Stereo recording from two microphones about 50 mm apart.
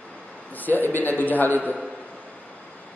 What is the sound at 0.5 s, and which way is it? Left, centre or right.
A woman's voice, left.